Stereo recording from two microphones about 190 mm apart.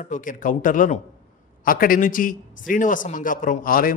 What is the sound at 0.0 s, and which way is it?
A man's voice, 45° left (ahead or behind).